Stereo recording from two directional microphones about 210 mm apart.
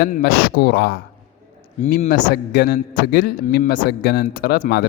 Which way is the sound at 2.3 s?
50° left (ahead or behind).